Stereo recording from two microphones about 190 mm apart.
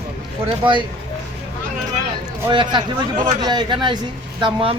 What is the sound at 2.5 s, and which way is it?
A man's voice, 25° right (ahead or behind).